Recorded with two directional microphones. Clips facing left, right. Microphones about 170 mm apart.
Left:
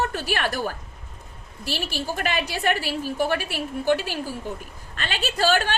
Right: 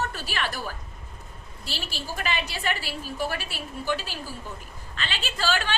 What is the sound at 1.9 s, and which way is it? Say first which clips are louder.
A woman's voice: left 2 dB; 50° left (ahead or behind).